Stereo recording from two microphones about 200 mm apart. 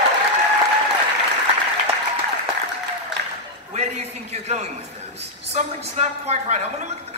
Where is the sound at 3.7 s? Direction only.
35° right (ahead or behind).